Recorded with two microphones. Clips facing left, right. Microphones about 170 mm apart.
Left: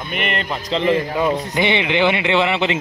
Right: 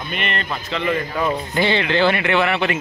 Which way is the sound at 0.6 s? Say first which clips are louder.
Left 6 dB; 30° left (ahead or behind).